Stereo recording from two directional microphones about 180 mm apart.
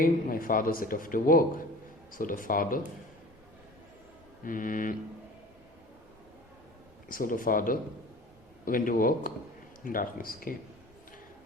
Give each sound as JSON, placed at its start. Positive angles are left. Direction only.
{"t": 0.0, "sound": "speech", "side_deg": 50}
{"t": 4.4, "sound": "speech", "side_deg": 50}
{"t": 7.1, "sound": "speech", "side_deg": 50}